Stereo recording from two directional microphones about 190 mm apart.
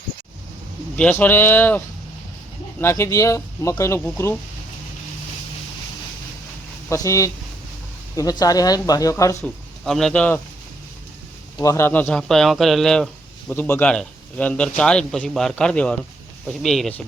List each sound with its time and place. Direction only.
0.9 s speech: 10° left (ahead or behind)
2.8 s speech: 15° left (ahead or behind)
6.9 s speech: 15° left (ahead or behind)
9.4 s speech: 5° left (ahead or behind)
11.5 s a man's voice: 15° left (ahead or behind)